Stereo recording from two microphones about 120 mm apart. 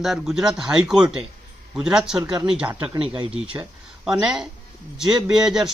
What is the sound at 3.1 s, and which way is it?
Speech, 45° right (ahead or behind).